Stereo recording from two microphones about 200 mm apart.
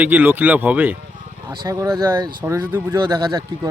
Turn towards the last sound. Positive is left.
turn(degrees=-20)  # may be behind; listen again after turning